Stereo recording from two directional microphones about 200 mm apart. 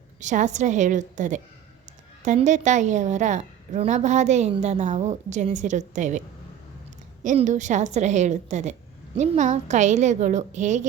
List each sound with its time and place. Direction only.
0.2 s a woman's voice: 35° right (ahead or behind)